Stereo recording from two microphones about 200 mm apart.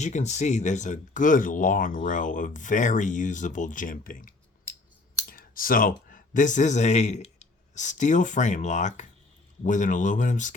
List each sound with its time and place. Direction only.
0.0 s speech: 35° left (ahead or behind)